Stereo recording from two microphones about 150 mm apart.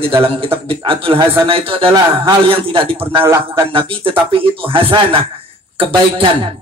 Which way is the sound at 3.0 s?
15° right (ahead or behind).